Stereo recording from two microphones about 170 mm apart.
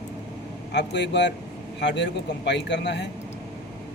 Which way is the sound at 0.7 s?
90° left.